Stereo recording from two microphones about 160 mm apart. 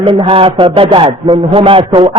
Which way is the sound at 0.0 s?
30° right (ahead or behind).